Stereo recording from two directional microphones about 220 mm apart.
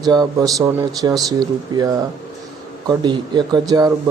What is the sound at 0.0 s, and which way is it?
A man's voice, 15° right (ahead or behind).